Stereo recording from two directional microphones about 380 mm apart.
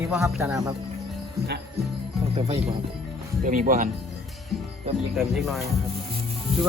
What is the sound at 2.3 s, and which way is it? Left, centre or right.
Speech, centre.